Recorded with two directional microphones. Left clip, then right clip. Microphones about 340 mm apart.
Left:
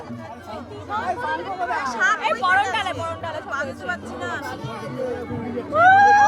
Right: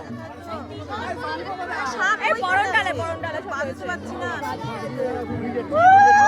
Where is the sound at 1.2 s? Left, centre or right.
Centre.